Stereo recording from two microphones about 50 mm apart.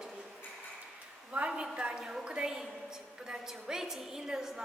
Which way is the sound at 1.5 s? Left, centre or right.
Centre.